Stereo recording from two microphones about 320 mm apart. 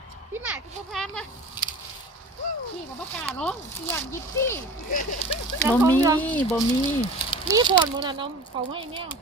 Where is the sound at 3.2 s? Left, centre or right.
Centre.